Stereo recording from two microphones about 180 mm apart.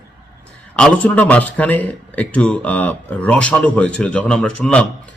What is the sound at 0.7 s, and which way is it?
A man's voice, 5° left (ahead or behind).